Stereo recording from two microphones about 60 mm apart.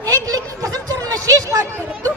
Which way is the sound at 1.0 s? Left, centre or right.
Right.